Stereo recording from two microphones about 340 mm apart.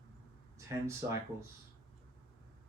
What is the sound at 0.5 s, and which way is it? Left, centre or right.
Speech, centre.